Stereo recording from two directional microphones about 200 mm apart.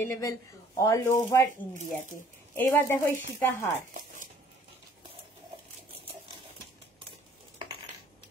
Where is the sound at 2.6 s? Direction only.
15° left (ahead or behind).